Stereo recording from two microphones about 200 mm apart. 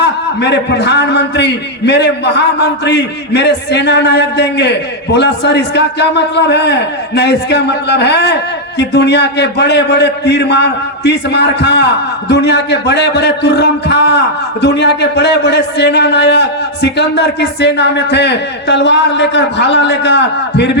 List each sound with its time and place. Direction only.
0.0 s a man's voice: 55° left (ahead or behind)